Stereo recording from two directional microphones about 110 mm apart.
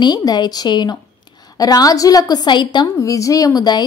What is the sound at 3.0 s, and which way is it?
Speech, 30° left (ahead or behind).